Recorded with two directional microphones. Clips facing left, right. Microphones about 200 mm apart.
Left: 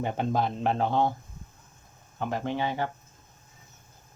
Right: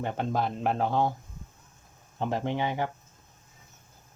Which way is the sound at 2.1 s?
25° right (ahead or behind).